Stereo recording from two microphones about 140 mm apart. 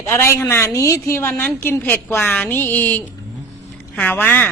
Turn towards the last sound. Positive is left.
turn(degrees=15)  # may be behind; listen again after turning